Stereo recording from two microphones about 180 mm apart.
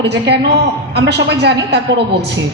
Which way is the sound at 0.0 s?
70° right (ahead or behind).